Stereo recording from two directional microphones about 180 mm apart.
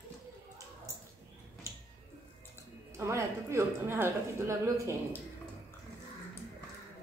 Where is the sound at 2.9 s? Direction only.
15° right (ahead or behind).